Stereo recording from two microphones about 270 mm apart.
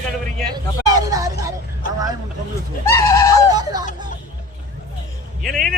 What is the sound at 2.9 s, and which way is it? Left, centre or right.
Speech, centre.